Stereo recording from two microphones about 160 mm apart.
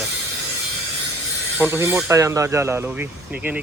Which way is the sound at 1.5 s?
10° right (ahead or behind).